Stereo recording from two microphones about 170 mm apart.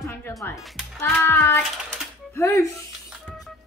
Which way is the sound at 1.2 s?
15° left (ahead or behind).